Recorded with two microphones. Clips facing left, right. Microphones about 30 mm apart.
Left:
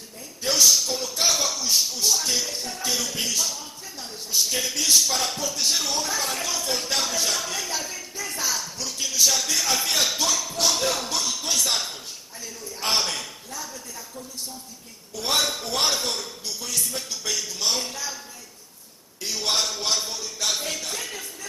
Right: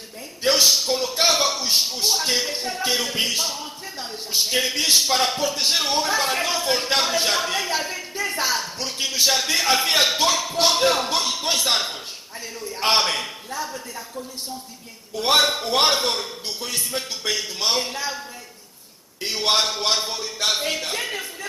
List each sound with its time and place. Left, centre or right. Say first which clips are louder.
0.4 s speech: right 2 dB; right
19.2 s speech: right 5 dB; right